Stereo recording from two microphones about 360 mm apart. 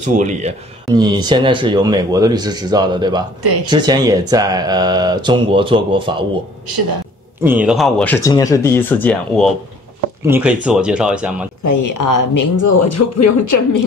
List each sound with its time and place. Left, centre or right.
0.0 s speech: centre
7.4 s speech: centre
11.6 s speech: left